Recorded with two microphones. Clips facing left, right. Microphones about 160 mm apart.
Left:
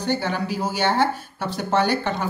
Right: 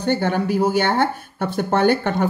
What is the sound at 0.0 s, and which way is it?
Speech, 55° right (ahead or behind).